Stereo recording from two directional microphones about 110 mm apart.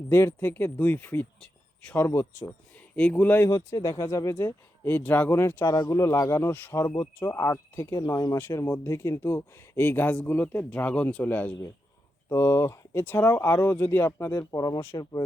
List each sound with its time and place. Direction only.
0.1 s speech: 20° left (ahead or behind)
2.0 s speech: 25° left (ahead or behind)
2.9 s speech: 15° left (ahead or behind)
3.5 s speech: 30° left (ahead or behind)
8.4 s speech: 20° left (ahead or behind)
14.5 s speech: 35° left (ahead or behind)